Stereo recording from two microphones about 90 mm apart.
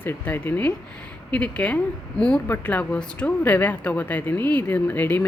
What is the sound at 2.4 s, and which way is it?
Speech, 25° left (ahead or behind).